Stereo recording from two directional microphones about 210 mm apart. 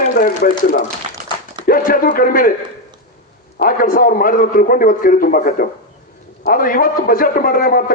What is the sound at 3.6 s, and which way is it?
Speech, 45° left (ahead or behind).